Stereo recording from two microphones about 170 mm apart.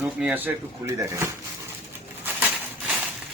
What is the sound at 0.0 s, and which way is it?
Speech, 5° right (ahead or behind).